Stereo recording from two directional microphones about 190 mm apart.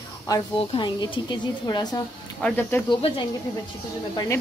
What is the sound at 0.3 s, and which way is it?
A woman's voice, 20° left (ahead or behind).